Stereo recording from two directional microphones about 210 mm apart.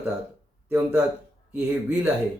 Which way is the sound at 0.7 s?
10° right (ahead or behind).